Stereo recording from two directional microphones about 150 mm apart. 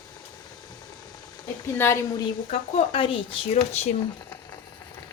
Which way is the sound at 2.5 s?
40° left (ahead or behind).